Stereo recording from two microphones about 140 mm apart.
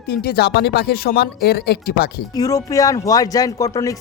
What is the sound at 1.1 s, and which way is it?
Speech, 90° left.